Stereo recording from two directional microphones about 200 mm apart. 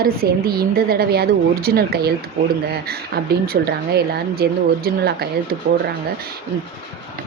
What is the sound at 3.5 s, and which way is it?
A woman's voice, 50° right (ahead or behind).